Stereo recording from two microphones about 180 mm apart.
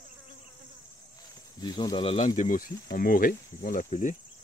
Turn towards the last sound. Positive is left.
turn(degrees=45)  # may be behind; listen again after turning